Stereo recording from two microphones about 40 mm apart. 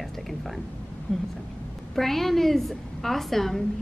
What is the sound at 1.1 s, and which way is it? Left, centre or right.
Speech, left.